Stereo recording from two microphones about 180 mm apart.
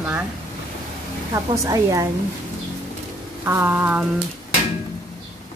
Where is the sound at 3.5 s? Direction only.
15° right (ahead or behind).